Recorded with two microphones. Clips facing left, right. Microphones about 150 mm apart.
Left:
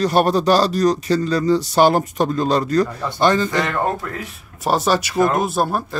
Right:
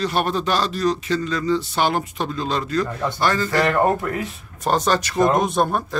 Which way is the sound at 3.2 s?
20° left (ahead or behind).